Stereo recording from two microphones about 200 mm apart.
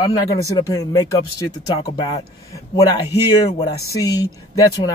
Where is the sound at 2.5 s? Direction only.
20° left (ahead or behind).